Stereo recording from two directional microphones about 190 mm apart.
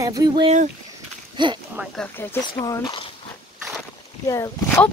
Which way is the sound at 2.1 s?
15° left (ahead or behind).